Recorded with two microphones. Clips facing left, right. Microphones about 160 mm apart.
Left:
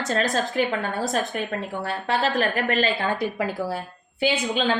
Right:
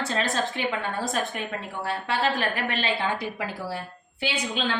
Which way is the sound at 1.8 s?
40° left (ahead or behind).